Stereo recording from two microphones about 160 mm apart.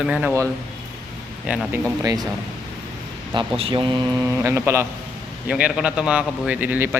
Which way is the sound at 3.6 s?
35° right (ahead or behind).